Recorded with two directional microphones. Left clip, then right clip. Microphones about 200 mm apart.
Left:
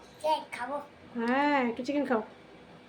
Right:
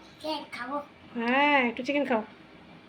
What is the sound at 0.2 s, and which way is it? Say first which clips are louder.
Speech: left 5 dB; 30° left (ahead or behind).